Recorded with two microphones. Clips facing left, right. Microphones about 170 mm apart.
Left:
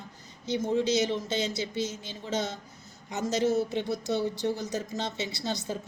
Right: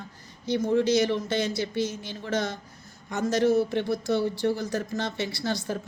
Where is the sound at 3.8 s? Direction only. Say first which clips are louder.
Right 3 dB; 20° left (ahead or behind).